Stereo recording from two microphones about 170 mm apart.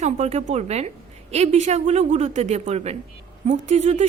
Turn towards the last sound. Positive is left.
turn(degrees=-40)  # may be behind; listen again after turning